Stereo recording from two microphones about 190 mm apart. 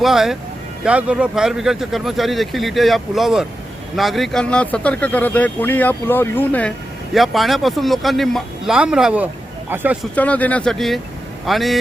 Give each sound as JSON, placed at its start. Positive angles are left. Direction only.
{"t": 0.0, "sound": "speech", "side_deg": 0}
{"t": 10.2, "sound": "speech", "side_deg": 10}